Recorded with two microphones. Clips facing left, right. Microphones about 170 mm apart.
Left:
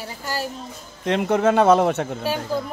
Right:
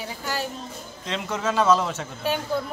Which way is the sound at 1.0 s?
55° left (ahead or behind).